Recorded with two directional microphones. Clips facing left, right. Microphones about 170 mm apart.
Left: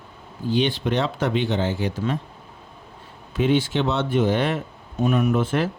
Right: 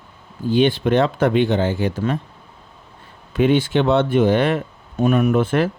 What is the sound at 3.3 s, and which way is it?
Speech, 60° right (ahead or behind).